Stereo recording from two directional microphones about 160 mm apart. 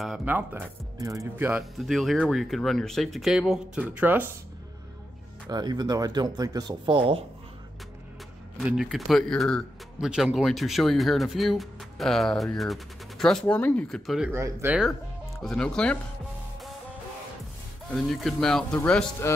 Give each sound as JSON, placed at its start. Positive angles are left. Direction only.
{"t": 0.0, "sound": "speech", "side_deg": 0}
{"t": 0.3, "sound": "speech", "side_deg": -10}
{"t": 1.6, "sound": "speech", "side_deg": 0}
{"t": 5.5, "sound": "speech", "side_deg": -25}
{"t": 8.5, "sound": "speech", "side_deg": 0}
{"t": 14.3, "sound": "speech", "side_deg": -15}
{"t": 15.4, "sound": "speech", "side_deg": 5}
{"t": 17.9, "sound": "speech", "side_deg": 0}